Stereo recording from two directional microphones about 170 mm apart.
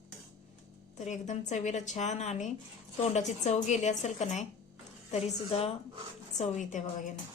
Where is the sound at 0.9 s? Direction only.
45° left (ahead or behind).